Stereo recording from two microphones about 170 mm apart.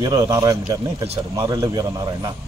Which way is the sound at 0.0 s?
20° right (ahead or behind).